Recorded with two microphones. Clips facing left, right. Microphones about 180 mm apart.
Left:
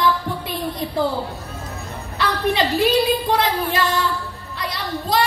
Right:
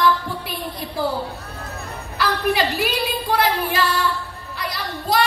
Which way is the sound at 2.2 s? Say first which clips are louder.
Even; 25° left (ahead or behind).